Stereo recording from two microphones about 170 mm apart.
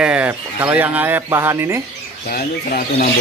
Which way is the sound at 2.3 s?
60° left (ahead or behind).